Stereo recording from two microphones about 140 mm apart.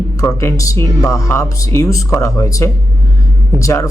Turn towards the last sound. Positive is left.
turn(degrees=20)  # may be behind; listen again after turning